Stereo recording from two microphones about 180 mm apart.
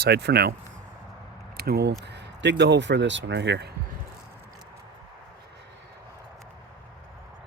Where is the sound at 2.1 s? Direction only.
75° right (ahead or behind).